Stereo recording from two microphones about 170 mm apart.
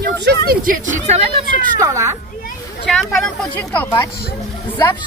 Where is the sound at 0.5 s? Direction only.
50° right (ahead or behind).